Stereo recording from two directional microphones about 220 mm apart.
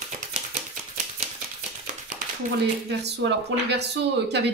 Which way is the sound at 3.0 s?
50° right (ahead or behind).